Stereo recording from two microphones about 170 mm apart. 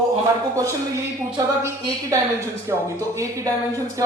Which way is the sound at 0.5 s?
20° right (ahead or behind).